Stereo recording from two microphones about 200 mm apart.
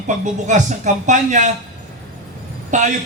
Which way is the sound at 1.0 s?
40° right (ahead or behind).